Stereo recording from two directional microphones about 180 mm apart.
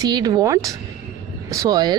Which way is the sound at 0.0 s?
20° right (ahead or behind).